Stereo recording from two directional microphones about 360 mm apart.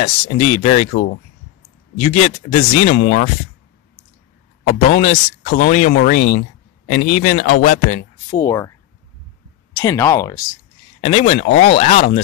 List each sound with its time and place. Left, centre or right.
0.0 s speech: centre
4.6 s speech: centre
8.4 s speech: centre
9.8 s speech: centre